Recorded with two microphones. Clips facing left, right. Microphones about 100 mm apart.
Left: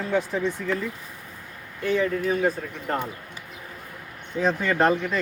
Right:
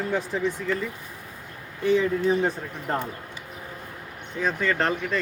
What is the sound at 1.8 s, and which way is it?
Speech, 15° right (ahead or behind).